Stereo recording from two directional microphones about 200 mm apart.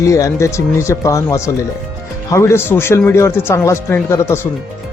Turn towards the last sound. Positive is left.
turn(degrees=15)  # may be behind; listen again after turning